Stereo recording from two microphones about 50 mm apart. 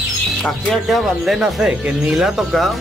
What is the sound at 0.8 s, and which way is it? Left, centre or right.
Speech, centre.